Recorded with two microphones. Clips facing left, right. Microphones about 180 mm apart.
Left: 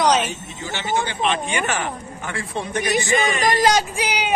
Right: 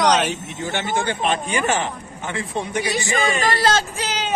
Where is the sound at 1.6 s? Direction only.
25° right (ahead or behind).